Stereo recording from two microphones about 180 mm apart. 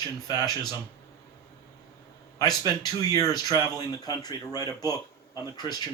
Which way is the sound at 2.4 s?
20° left (ahead or behind).